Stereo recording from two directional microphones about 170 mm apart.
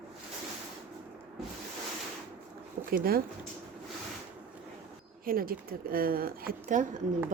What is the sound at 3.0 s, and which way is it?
Speech, 60° right (ahead or behind).